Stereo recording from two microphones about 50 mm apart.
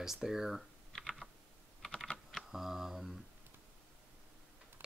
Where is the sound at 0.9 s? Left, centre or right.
Centre.